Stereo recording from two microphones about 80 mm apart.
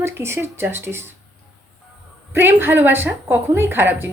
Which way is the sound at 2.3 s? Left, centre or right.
Right.